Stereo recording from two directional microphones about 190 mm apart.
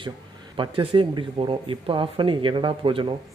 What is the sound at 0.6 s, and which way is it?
Speech, 25° right (ahead or behind).